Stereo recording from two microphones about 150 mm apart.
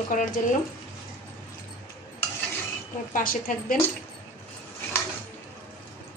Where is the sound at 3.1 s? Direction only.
70° left (ahead or behind).